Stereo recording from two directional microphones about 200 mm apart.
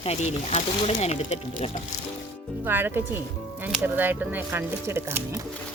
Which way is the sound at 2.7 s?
10° right (ahead or behind).